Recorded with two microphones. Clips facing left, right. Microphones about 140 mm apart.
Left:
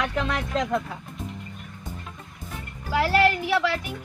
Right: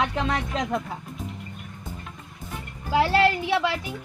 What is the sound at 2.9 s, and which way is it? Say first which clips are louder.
Speech: right 1 dB; 25° right (ahead or behind).